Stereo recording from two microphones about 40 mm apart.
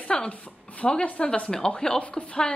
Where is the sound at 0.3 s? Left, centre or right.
Left.